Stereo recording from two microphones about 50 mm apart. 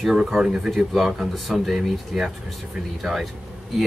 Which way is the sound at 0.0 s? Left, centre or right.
Centre.